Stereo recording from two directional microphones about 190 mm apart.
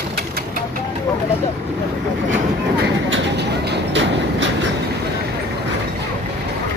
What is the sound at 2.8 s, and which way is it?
Train, 65° right (ahead or behind).